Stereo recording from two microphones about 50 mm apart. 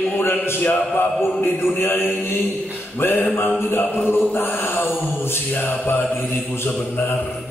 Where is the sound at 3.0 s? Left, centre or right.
Left.